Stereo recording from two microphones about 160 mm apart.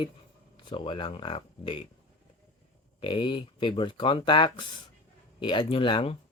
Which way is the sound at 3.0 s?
30° left (ahead or behind).